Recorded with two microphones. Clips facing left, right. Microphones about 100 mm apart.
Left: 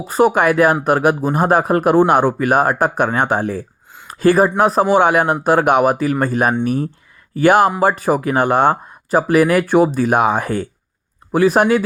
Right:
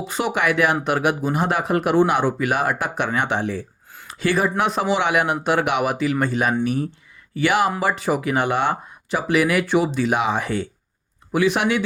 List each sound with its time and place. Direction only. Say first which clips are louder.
0.0 s speech: left 8 dB; 45° left (ahead or behind)